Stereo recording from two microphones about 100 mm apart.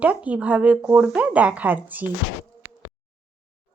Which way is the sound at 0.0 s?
15° right (ahead or behind).